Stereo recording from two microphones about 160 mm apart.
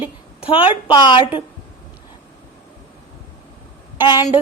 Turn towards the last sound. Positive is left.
turn(degrees=25)  # may be behind; listen again after turning